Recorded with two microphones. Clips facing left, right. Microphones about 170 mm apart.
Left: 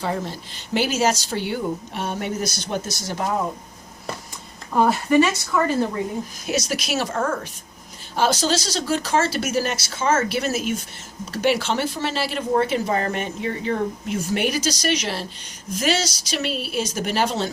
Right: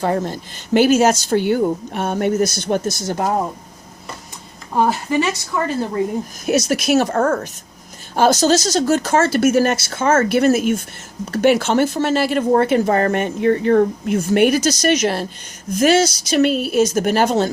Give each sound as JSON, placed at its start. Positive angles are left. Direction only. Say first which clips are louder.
{"t": 0.0, "sound": "speech", "louder": "right 6 dB", "side_deg": -50}
{"t": 4.7, "sound": "speech", "louder": "even", "side_deg": -25}
{"t": 6.4, "sound": "speech", "louder": "right 9 dB", "side_deg": -50}